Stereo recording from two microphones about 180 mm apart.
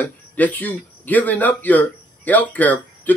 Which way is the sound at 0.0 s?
10° left (ahead or behind).